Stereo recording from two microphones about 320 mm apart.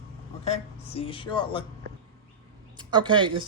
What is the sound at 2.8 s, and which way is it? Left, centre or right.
Speech, centre.